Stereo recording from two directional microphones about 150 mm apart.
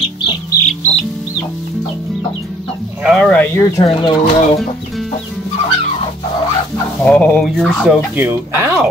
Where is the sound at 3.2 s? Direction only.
5° left (ahead or behind).